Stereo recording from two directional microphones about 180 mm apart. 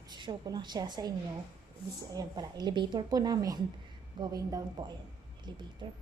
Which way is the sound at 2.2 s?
20° right (ahead or behind).